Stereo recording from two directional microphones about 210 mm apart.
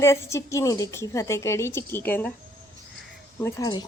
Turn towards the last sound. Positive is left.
turn(degrees=15)  # may be behind; listen again after turning